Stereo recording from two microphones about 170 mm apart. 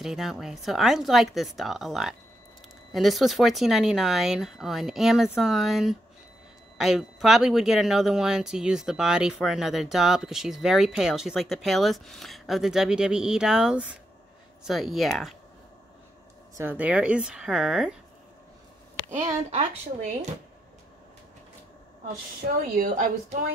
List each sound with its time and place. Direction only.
0.0 s speech: centre (ahead or behind)
16.5 s speech: 10° right (ahead or behind)
19.0 s a woman's voice: 15° right (ahead or behind)
19.5 s speech: 40° right (ahead or behind)
22.8 s a woman's voice: 50° right (ahead or behind)